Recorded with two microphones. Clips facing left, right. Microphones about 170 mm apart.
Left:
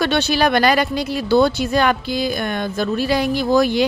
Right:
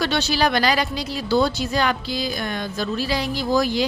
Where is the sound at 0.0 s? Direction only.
55° left (ahead or behind).